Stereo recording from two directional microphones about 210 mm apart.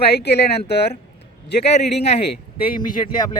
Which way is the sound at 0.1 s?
50° left (ahead or behind).